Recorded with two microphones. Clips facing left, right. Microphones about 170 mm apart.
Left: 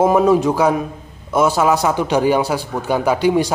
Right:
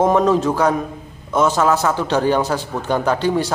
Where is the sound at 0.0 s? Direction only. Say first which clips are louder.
Left 2 dB; 10° left (ahead or behind).